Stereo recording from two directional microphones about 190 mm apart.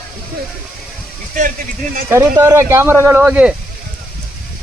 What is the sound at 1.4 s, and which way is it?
Speech, 45° right (ahead or behind).